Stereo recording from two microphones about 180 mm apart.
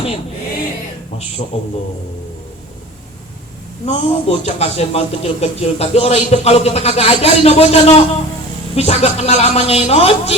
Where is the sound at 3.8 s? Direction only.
35° left (ahead or behind).